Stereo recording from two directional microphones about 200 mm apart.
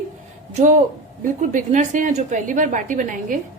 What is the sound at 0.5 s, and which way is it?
A woman's voice, 35° right (ahead or behind).